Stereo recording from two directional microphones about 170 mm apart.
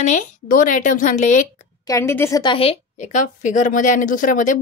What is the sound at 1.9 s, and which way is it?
Speech, 15° left (ahead or behind).